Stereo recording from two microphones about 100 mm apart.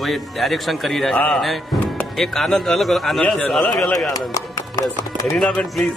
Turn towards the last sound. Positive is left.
turn(degrees=5)  # may be behind; listen again after turning